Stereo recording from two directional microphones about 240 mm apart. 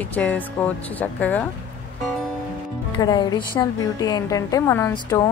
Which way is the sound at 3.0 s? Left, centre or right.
Centre.